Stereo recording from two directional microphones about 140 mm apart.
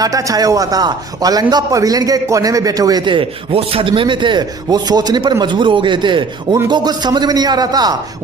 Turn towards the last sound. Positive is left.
turn(degrees=-30)  # may be behind; listen again after turning